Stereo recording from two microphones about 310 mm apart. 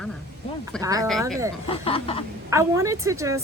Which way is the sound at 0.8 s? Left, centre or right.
Centre.